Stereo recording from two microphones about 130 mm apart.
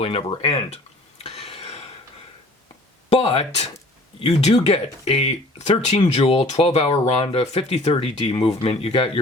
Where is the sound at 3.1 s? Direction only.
50° left (ahead or behind).